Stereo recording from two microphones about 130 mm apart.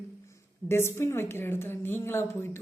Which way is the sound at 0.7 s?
20° left (ahead or behind).